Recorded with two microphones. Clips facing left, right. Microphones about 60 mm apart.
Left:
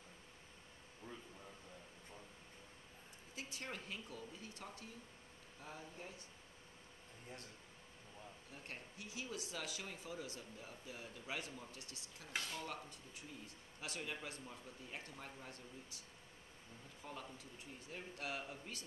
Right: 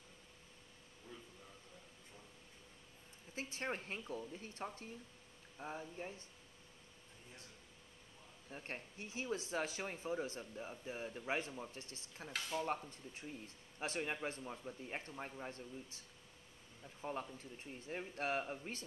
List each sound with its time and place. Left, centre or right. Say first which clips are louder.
3.3 s speech: right 6 dB; right
8.5 s speech: right 8 dB; right
17.0 s speech: right 7 dB; right